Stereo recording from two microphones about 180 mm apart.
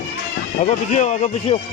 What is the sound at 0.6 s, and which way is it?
Speech, 40° left (ahead or behind).